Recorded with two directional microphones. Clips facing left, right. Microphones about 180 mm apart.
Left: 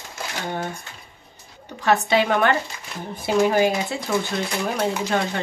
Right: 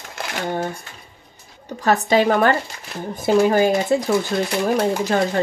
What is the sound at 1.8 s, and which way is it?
Speech, 40° right (ahead or behind).